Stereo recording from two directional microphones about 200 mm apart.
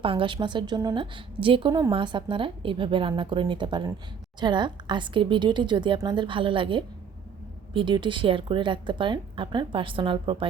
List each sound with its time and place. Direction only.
0.0 s a woman's voice: 25° right (ahead or behind)